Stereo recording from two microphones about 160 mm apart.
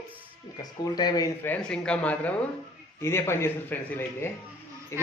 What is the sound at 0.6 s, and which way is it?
Speech, 25° left (ahead or behind).